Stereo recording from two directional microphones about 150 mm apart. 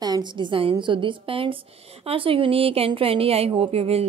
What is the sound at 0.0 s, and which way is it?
A woman's voice, 30° right (ahead or behind).